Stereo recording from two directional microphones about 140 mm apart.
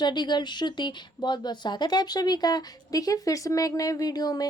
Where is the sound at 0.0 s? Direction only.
30° left (ahead or behind).